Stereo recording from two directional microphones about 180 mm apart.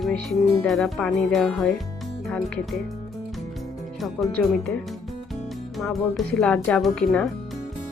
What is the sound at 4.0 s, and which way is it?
Speech, centre (ahead or behind).